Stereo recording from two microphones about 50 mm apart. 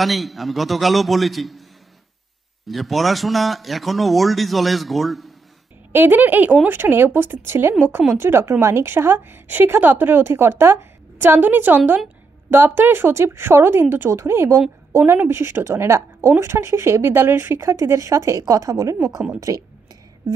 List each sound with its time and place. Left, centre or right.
0.0 s a man's voice: centre
2.6 s a man's voice: centre
5.9 s a woman's voice: right
8.9 s a woman's voice: right
15.2 s a woman's voice: right
15.6 s speech: right